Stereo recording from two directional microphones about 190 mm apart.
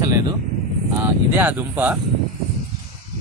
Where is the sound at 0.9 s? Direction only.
10° right (ahead or behind).